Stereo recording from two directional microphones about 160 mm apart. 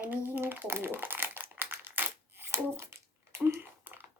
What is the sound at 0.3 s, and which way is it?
Crumpling, 10° right (ahead or behind).